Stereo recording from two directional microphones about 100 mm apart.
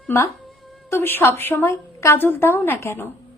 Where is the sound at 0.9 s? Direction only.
20° left (ahead or behind).